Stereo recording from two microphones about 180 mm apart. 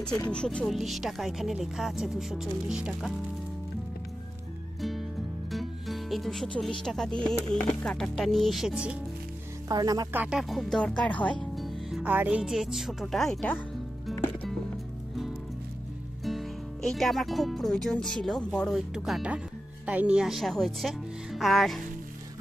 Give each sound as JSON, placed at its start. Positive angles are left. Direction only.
{"t": 0.3, "sound": "speech", "side_deg": 5}
{"t": 5.5, "sound": "music", "side_deg": 0}
{"t": 6.8, "sound": "speech", "side_deg": 5}
{"t": 9.7, "sound": "speech", "side_deg": -20}
{"t": 10.2, "sound": "speech", "side_deg": 0}
{"t": 16.3, "sound": "speech", "side_deg": 0}